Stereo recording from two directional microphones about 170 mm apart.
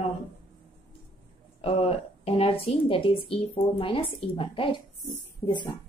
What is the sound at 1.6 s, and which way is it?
Speech, 35° left (ahead or behind).